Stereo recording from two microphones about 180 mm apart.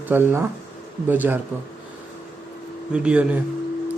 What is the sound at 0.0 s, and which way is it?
Speech, 10° right (ahead or behind).